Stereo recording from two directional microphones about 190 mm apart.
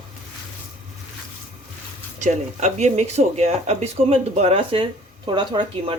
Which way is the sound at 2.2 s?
35° right (ahead or behind).